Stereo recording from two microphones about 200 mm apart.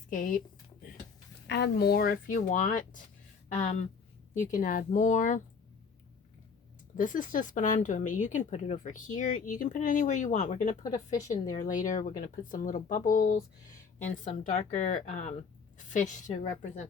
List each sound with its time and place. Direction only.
0.1 s speech: 40° left (ahead or behind)
1.5 s speech: 60° left (ahead or behind); by 5.4 s 40° left (ahead or behind)
6.9 s speech: 40° left (ahead or behind)